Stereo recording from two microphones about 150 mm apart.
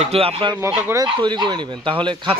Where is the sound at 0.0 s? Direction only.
40° right (ahead or behind).